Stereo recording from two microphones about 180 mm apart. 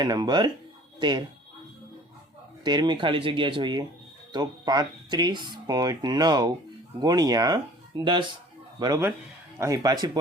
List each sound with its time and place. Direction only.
0.0 s speech: 20° right (ahead or behind)
2.6 s speech: 25° right (ahead or behind)